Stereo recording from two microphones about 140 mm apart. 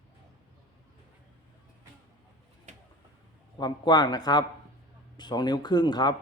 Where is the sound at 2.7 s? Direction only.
55° right (ahead or behind).